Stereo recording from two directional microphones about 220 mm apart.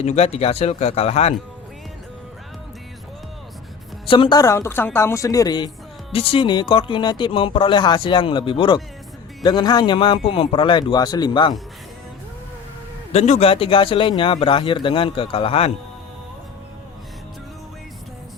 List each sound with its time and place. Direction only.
0.0 s a woman's voice: 30° left (ahead or behind)
4.1 s a woman's voice: 20° left (ahead or behind)
13.1 s a woman's voice: 30° left (ahead or behind)